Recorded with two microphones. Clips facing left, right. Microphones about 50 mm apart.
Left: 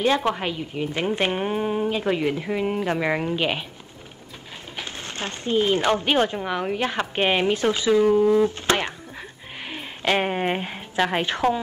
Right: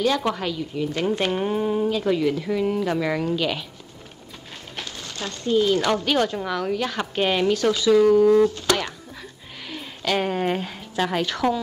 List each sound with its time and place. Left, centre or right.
0.2 s a woman's voice: left
4.8 s speech: left